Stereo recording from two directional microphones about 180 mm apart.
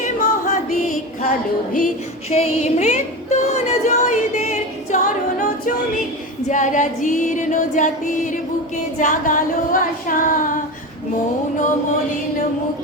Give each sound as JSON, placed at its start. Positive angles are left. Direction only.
{"t": 0.0, "sound": "music", "side_deg": 40}
{"t": 2.3, "sound": "a sound", "side_deg": 35}
{"t": 6.5, "sound": "music", "side_deg": 45}